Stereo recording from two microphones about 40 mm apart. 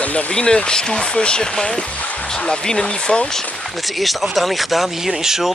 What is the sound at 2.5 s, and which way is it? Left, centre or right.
Speech, centre.